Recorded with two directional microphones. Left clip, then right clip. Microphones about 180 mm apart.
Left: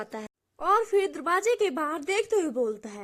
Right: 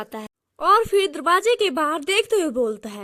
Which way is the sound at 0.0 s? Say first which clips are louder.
Right 4 dB; 25° right (ahead or behind).